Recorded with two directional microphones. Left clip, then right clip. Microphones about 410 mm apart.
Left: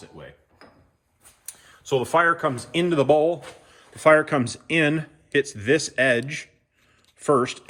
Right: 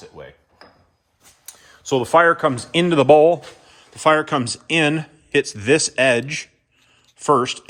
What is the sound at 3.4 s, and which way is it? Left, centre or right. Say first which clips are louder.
Speech: right 2 dB; centre.